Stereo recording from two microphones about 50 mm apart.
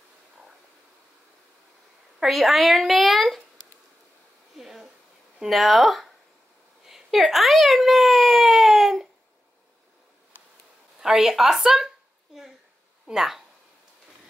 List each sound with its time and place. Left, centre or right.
2.1 s a woman's voice: centre
4.6 s a sound: centre
5.5 s a child's voice: centre
11.0 s speech: centre
13.1 s speech: centre